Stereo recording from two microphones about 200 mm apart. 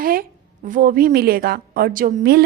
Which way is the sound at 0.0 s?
45° right (ahead or behind).